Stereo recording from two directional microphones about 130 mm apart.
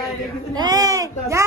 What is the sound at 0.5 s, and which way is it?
Speech, 30° right (ahead or behind).